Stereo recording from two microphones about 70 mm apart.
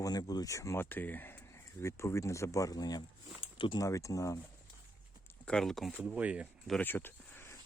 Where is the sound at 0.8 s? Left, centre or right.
Left.